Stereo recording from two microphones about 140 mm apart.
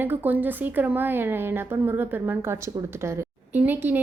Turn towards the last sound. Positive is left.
turn(degrees=-15)  # may be behind; listen again after turning